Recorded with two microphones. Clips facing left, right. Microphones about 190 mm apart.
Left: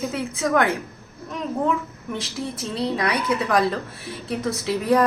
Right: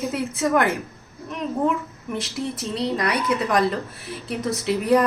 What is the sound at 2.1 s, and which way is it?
Speech, centre (ahead or behind).